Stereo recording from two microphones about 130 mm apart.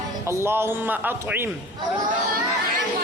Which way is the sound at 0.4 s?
15° right (ahead or behind).